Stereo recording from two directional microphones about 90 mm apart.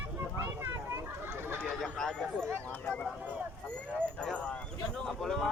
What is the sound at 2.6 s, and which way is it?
Speech, 15° left (ahead or behind).